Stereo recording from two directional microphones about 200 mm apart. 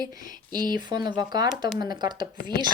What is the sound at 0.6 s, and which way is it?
Speech, 45° left (ahead or behind).